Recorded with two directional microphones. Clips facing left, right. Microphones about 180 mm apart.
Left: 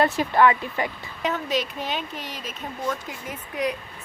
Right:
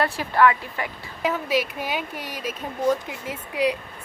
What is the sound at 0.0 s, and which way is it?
Speech, 20° left (ahead or behind).